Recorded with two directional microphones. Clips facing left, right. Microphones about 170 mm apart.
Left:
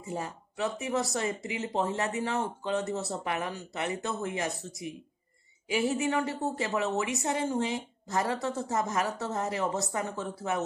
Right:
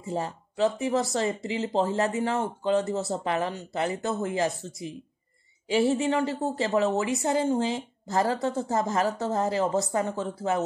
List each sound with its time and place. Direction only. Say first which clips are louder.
0.1 s a woman's voice: right 5 dB; 30° right (ahead or behind)